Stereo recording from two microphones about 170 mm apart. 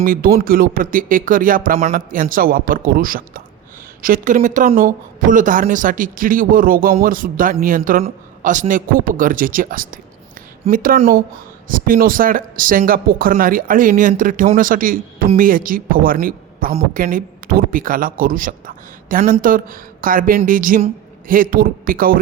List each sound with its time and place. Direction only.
0.0 s speech: 55° right (ahead or behind)